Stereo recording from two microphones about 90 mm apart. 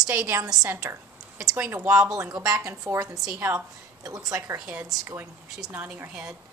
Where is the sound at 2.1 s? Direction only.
40° right (ahead or behind).